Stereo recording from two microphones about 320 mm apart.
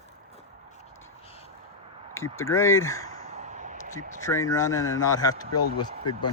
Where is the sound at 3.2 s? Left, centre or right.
Right.